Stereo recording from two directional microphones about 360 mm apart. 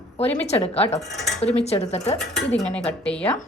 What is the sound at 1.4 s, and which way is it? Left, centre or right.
Speech, centre.